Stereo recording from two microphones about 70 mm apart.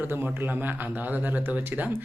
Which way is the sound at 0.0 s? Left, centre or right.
Right.